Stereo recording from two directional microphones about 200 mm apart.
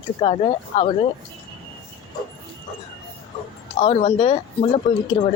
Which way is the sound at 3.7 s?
30° left (ahead or behind).